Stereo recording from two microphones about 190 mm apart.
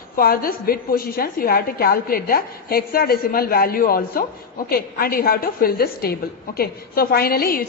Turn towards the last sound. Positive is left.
turn(degrees=50)  # may be behind; listen again after turning